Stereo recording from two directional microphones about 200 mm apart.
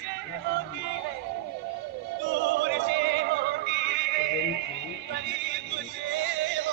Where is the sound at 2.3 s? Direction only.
60° right (ahead or behind).